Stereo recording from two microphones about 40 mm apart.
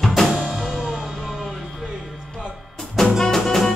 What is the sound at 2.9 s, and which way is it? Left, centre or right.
Music, centre.